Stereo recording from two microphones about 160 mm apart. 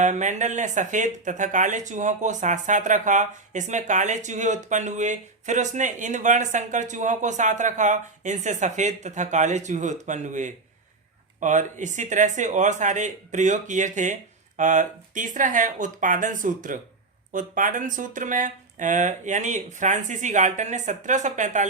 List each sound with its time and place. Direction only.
0.0 s speech: 50° right (ahead or behind)